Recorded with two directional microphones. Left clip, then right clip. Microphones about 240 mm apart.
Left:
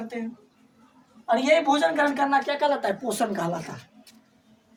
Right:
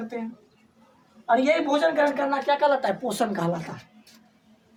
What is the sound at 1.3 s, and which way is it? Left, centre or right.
Speech, centre.